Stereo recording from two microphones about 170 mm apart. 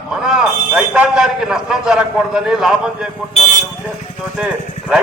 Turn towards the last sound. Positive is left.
turn(degrees=-5)  # may be behind; listen again after turning